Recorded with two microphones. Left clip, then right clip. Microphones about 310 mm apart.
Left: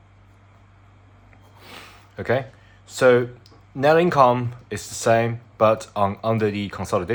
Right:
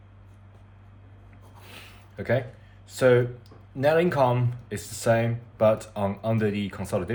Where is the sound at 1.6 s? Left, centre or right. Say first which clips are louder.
Left 5 dB; left.